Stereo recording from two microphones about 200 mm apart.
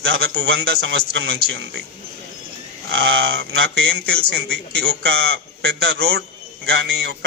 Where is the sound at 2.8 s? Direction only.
55° right (ahead or behind).